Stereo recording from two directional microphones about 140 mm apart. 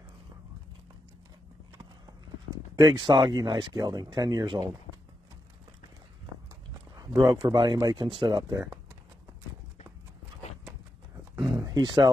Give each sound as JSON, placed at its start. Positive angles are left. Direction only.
{"t": 2.5, "sound": "speech", "side_deg": -30}
{"t": 7.2, "sound": "speech", "side_deg": -35}
{"t": 11.3, "sound": "a sound", "side_deg": -25}